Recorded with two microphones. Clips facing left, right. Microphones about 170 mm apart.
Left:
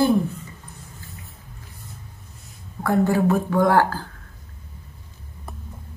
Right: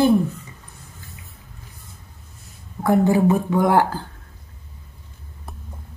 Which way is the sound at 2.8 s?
20° right (ahead or behind).